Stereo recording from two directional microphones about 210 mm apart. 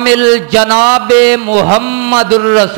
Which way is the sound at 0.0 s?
15° right (ahead or behind).